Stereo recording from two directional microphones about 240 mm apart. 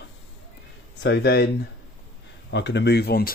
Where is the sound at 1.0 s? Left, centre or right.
Left.